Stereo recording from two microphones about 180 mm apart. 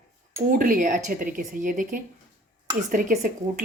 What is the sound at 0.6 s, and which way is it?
Speech, 45° right (ahead or behind).